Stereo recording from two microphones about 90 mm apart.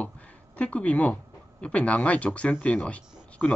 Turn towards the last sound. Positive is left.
turn(degrees=15)  # may be behind; listen again after turning